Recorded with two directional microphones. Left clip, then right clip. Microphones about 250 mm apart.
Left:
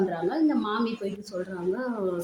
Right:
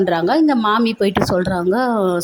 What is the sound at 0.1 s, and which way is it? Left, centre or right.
A woman's voice, right.